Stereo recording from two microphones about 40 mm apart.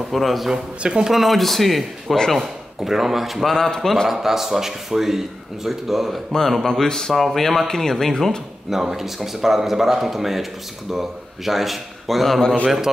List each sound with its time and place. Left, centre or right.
0.1 s speech: centre
0.5 s speech: centre
1.1 s speech: centre
3.4 s speech: centre
4.1 s speech: centre
6.6 s speech: centre
8.9 s speech: centre